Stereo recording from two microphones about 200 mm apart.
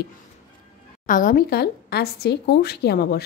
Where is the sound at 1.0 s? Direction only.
40° left (ahead or behind).